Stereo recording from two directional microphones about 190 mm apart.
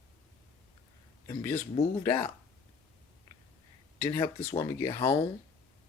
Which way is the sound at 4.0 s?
15° left (ahead or behind).